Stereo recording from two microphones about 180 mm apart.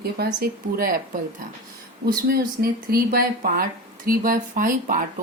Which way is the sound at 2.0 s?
55° right (ahead or behind).